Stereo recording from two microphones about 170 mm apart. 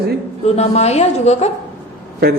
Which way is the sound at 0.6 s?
40° left (ahead or behind).